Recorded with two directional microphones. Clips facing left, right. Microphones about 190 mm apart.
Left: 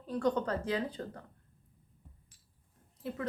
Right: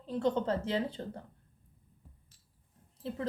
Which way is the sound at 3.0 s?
30° right (ahead or behind).